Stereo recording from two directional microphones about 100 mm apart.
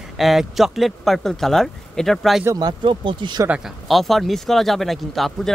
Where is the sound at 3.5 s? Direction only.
Centre (ahead or behind).